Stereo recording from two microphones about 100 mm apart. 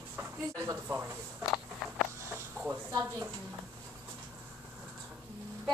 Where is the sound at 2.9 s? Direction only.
35° right (ahead or behind).